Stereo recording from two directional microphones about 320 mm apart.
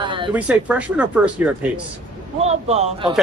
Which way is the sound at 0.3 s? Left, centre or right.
Centre.